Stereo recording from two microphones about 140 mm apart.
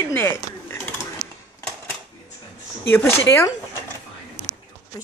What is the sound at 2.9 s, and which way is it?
Speech, 20° left (ahead or behind).